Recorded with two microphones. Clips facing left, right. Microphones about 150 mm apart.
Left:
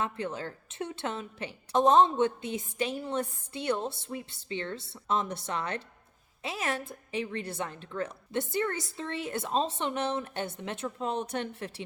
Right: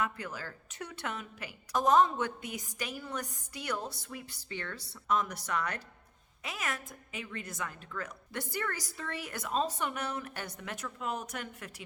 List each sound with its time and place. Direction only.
0.0 s a woman's voice: 25° left (ahead or behind)